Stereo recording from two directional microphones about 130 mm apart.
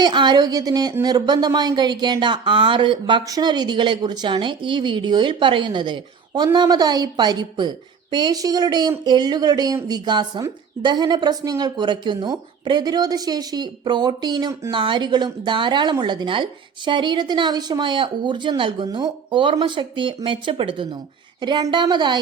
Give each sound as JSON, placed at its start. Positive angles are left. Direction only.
{"t": 0.0, "sound": "speech", "side_deg": -35}